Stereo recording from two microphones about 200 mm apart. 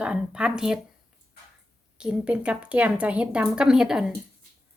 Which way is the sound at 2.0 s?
5° right (ahead or behind).